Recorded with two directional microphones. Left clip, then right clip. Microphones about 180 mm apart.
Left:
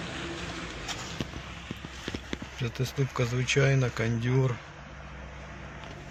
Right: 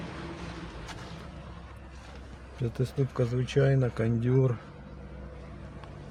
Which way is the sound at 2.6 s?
40° right (ahead or behind).